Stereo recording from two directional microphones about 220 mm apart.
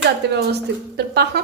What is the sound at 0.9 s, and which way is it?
Speech, 50° right (ahead or behind).